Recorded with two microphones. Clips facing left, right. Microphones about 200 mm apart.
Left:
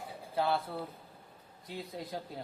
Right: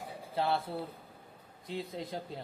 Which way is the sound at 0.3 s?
25° right (ahead or behind).